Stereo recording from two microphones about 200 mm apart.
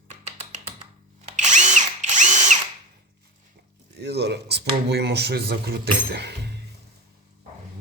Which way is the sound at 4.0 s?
55° right (ahead or behind).